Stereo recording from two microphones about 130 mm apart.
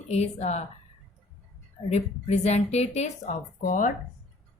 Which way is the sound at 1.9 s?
55° left (ahead or behind).